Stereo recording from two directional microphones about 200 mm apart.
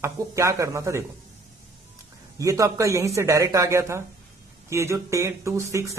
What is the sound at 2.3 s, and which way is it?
Speech, 15° right (ahead or behind).